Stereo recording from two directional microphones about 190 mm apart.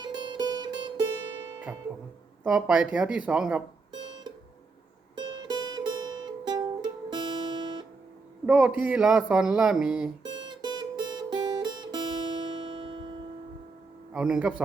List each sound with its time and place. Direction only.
0.0 s music: 25° right (ahead or behind)
2.4 s speech: 5° right (ahead or behind)
5.1 s music: 25° right (ahead or behind)
8.4 s speech: 5° right (ahead or behind)
10.2 s music: 25° right (ahead or behind)
14.1 s a man's voice: 5° right (ahead or behind)